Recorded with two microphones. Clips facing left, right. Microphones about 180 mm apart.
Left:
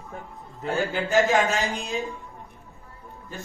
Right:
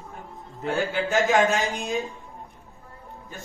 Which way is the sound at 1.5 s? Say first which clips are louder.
Right 2 dB; centre (ahead or behind).